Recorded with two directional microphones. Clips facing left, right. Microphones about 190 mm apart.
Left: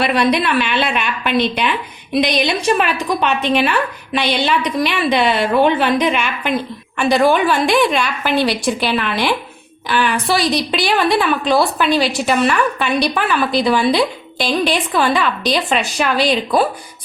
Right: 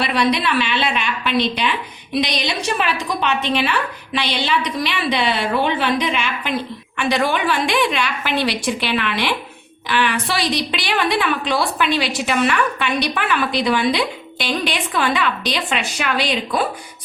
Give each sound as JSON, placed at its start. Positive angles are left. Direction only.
{"t": 0.0, "sound": "a woman's voice", "side_deg": 50}